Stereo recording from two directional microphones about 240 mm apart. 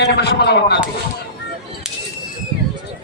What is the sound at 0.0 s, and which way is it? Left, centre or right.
Speech, left.